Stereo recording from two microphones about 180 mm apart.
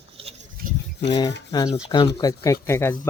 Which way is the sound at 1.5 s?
20° left (ahead or behind).